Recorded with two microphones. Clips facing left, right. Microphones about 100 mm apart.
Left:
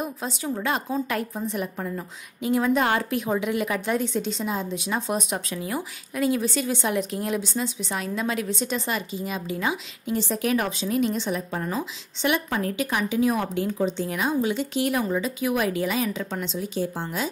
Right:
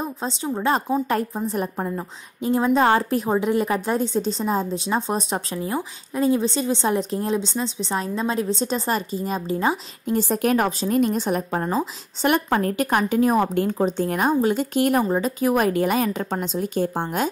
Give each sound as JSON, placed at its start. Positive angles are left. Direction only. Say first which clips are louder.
{"t": 0.0, "sound": "a woman's voice", "louder": "right 3 dB", "side_deg": -30}